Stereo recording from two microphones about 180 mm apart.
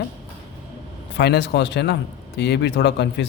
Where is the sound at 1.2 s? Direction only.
70° left (ahead or behind).